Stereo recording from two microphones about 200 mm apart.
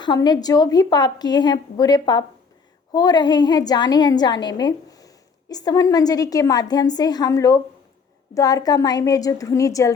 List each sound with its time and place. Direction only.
0.0 s a woman's voice: 20° left (ahead or behind)